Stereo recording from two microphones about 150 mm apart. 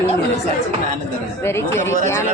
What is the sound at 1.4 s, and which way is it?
Speech, 15° left (ahead or behind).